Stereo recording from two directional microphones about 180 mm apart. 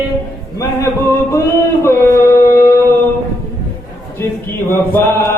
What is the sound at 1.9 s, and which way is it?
Music, 15° left (ahead or behind).